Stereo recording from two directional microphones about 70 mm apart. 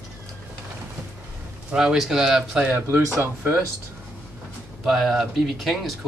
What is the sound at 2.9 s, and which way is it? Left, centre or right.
Speech, right.